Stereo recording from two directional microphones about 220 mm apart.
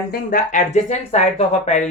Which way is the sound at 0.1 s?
35° left (ahead or behind).